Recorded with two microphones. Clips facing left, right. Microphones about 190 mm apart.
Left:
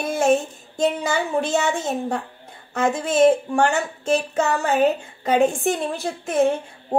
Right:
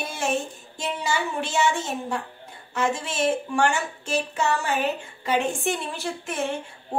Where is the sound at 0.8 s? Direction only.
50° left (ahead or behind).